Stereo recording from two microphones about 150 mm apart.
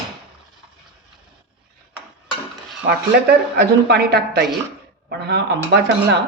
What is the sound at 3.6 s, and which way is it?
A woman's voice, 90° right.